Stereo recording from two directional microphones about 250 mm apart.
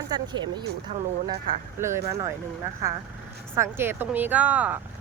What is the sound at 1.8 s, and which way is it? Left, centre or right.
Speech, centre.